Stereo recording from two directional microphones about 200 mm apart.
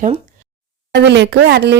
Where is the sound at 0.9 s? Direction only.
60° right (ahead or behind).